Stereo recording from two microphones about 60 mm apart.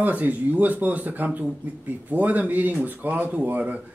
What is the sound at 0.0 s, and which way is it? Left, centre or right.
Speech, right.